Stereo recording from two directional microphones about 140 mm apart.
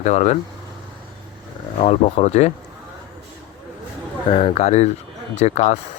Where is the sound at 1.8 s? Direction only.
50° left (ahead or behind).